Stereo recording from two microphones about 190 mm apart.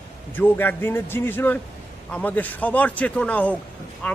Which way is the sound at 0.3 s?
10° left (ahead or behind).